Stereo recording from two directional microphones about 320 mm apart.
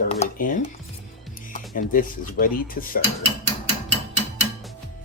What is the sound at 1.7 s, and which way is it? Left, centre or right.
Speech, left.